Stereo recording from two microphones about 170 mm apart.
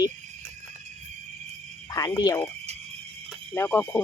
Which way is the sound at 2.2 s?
20° left (ahead or behind).